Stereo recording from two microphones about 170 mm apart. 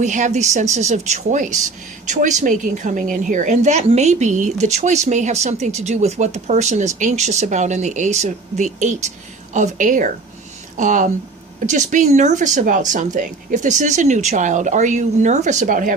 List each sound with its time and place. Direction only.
0.0 s a woman's voice: 45° right (ahead or behind)